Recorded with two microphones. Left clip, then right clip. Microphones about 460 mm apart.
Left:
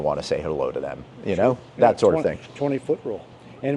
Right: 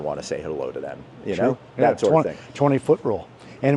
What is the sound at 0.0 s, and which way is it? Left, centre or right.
Speech, left.